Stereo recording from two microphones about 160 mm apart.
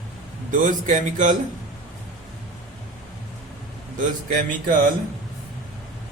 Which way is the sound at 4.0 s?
55° right (ahead or behind).